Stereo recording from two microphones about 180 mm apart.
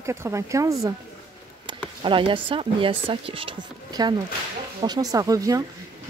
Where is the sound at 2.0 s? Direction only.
30° right (ahead or behind).